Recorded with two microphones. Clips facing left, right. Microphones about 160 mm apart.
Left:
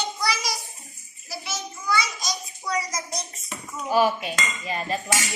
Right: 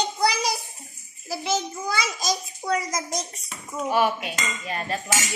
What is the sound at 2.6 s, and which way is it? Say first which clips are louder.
Speech: right 3 dB; 50° right (ahead or behind).